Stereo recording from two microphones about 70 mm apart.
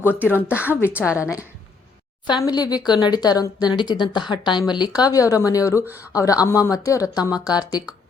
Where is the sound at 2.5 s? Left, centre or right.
Left.